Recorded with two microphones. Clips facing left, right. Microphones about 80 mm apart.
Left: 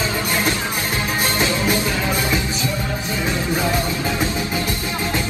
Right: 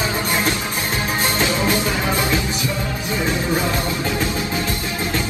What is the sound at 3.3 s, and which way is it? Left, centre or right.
Music, right.